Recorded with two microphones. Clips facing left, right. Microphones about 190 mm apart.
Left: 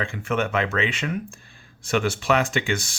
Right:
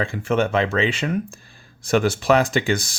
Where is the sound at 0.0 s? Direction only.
35° right (ahead or behind).